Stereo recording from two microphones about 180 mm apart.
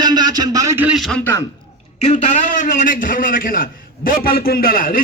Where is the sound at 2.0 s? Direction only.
40° left (ahead or behind).